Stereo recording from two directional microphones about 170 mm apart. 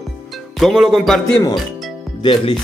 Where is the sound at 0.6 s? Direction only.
Centre (ahead or behind).